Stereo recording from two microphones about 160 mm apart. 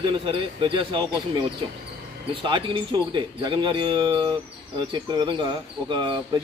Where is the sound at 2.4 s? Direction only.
30° right (ahead or behind).